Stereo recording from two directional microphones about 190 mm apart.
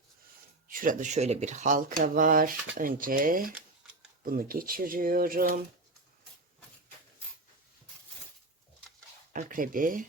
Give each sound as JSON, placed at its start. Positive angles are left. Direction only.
{"t": 0.7, "sound": "speech", "side_deg": -45}
{"t": 9.3, "sound": "speech", "side_deg": -45}